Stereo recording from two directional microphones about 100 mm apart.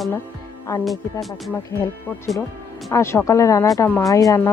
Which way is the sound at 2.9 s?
25° left (ahead or behind).